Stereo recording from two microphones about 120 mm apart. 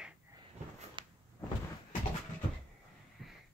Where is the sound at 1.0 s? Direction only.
40° right (ahead or behind).